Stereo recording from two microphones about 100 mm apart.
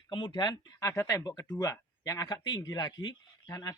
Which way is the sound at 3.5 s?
35° left (ahead or behind).